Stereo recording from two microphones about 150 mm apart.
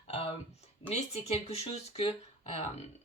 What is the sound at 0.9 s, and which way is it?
Speech, 45° left (ahead or behind).